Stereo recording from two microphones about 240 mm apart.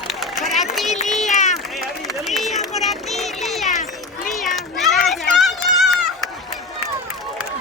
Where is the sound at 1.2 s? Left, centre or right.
Left.